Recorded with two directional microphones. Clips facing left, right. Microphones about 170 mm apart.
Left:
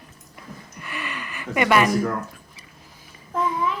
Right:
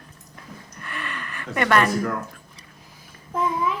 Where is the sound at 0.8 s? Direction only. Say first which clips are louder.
Left 1 dB; 5° left (ahead or behind).